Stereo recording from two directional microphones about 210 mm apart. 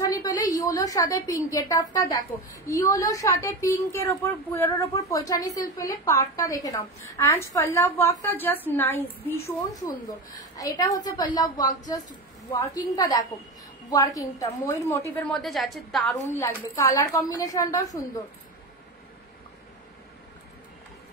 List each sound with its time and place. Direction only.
0.0 s a woman's voice: 15° left (ahead or behind)
10.6 s a woman's voice: 15° left (ahead or behind)
15.4 s a woman's voice: centre (ahead or behind)
16.3 s a woman's voice: 15° left (ahead or behind)